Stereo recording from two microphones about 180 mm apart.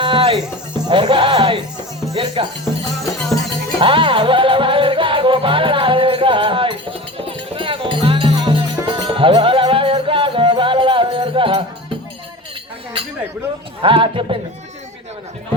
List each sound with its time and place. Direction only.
0.0 s music: 30° right (ahead or behind)
2.1 s a man's voice: 25° right (ahead or behind)
3.8 s music: 30° right (ahead or behind)
13.8 s a man's voice: 30° right (ahead or behind)